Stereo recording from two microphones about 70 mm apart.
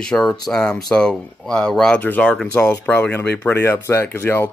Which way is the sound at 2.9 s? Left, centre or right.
Left.